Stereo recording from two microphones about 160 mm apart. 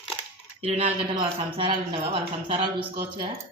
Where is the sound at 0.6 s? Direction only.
40° right (ahead or behind).